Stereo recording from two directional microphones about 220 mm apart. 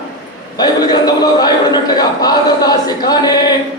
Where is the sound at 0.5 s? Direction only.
20° left (ahead or behind).